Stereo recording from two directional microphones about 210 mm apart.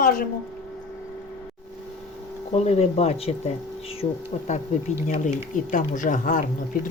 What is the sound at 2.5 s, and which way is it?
Speech, 30° left (ahead or behind).